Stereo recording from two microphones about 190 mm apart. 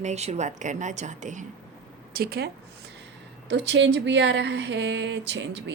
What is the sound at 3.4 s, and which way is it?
A woman's voice, 70° right (ahead or behind).